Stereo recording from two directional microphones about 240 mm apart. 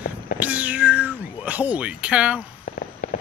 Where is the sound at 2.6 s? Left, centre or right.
Left.